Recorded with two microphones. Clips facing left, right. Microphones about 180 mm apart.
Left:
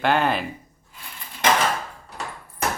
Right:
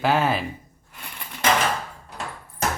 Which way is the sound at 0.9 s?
70° right (ahead or behind).